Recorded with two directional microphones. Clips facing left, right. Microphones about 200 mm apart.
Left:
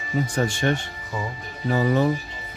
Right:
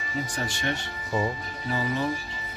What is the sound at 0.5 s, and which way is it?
Speech, 50° left (ahead or behind).